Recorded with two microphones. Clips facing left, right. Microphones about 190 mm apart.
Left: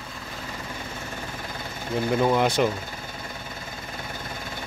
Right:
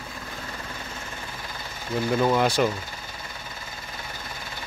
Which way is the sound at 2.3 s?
20° left (ahead or behind).